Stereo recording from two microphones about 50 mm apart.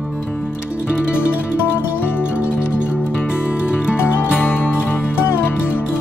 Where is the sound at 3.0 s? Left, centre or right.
Left.